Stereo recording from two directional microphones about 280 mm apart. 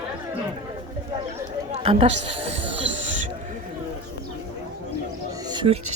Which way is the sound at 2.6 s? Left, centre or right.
Right.